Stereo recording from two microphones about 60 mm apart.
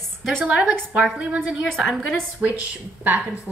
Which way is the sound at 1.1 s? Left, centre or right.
Centre.